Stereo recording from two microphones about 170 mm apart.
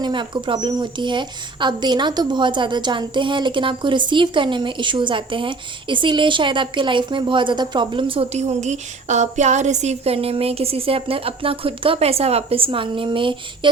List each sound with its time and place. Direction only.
0.0 s speech: 30° right (ahead or behind)